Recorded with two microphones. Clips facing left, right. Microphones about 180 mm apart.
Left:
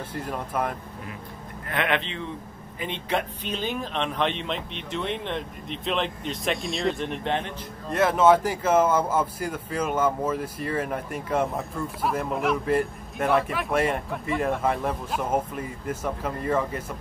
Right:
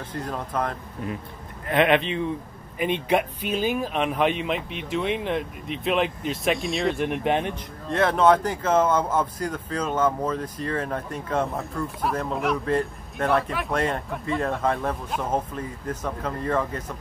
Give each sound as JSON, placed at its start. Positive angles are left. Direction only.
{"t": 0.1, "sound": "speech", "side_deg": 10}
{"t": 1.7, "sound": "speech", "side_deg": -20}
{"t": 7.1, "sound": "speech", "side_deg": -15}
{"t": 7.9, "sound": "speech", "side_deg": 0}